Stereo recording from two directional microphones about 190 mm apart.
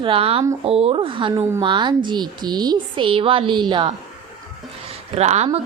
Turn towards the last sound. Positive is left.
turn(degrees=-35)  # may be behind; listen again after turning